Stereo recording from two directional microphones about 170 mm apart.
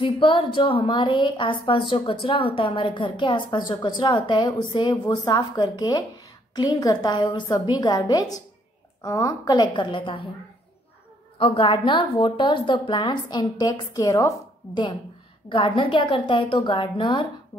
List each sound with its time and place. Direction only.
0.0 s a woman's voice: 30° left (ahead or behind)
11.3 s a woman's voice: 30° left (ahead or behind)